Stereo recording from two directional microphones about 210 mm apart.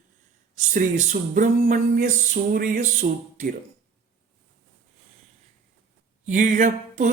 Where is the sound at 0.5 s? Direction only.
35° right (ahead or behind).